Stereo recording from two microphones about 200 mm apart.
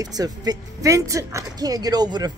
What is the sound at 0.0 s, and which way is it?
Speech, 20° right (ahead or behind).